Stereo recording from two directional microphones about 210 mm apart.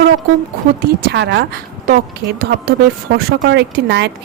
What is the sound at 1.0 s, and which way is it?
A woman's voice, 55° right (ahead or behind).